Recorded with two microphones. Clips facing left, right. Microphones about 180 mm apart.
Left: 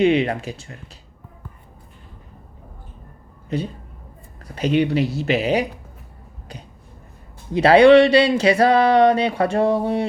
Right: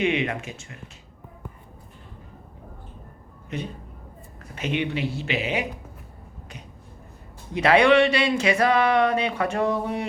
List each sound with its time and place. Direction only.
0.0 s speech: 35° left (ahead or behind)
3.5 s speech: 35° left (ahead or behind)
7.5 s speech: 30° left (ahead or behind)